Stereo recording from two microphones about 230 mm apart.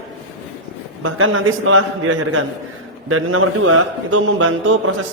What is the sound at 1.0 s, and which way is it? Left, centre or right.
A man's voice, right.